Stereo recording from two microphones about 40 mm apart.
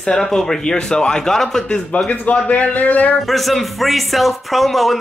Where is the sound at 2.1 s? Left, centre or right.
Left.